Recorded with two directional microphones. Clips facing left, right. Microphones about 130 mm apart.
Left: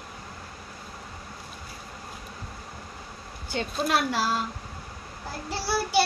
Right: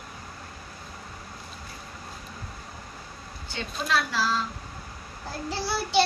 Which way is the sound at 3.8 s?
50° left (ahead or behind).